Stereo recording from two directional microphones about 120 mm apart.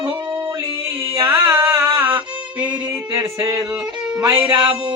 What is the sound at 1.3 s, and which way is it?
Music, 25° right (ahead or behind).